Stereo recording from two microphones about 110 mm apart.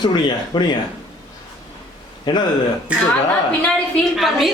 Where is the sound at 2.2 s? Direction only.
40° left (ahead or behind).